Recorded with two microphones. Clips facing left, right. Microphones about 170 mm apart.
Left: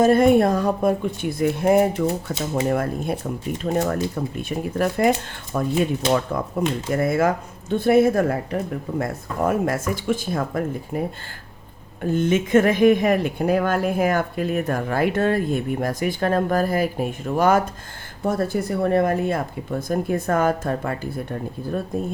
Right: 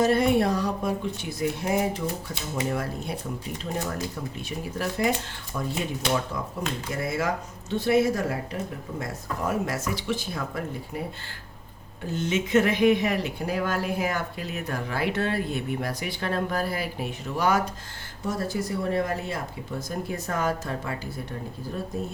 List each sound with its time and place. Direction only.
0.0 s a woman's voice: 50° left (ahead or behind)
12.0 s a woman's voice: 55° left (ahead or behind)